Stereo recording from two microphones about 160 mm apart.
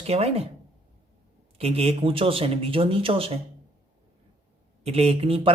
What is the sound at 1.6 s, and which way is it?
Speech, 40° right (ahead or behind).